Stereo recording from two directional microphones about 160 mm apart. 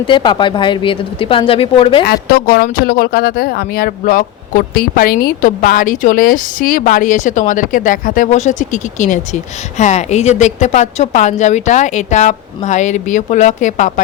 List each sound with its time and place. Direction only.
0.1 s speech: 30° left (ahead or behind)
2.3 s speech: 65° left (ahead or behind)
5.2 s speech: 55° left (ahead or behind)